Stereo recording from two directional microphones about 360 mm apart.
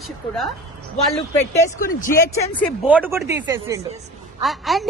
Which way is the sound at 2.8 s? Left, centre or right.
Centre.